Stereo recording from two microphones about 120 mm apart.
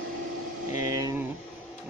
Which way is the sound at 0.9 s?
30° right (ahead or behind).